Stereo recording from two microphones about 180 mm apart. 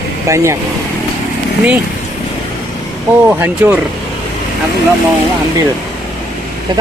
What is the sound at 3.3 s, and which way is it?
Speech, 10° right (ahead or behind).